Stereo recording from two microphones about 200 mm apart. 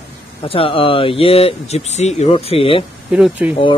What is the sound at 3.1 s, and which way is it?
Speech, 5° right (ahead or behind).